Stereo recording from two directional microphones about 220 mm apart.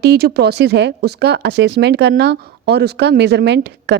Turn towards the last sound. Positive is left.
turn(degrees=-50)  # may be behind; listen again after turning